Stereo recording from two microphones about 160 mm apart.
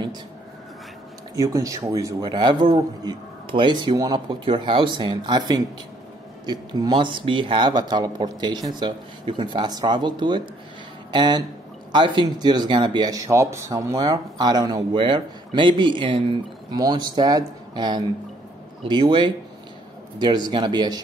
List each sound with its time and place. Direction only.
1.3 s speech: 20° right (ahead or behind)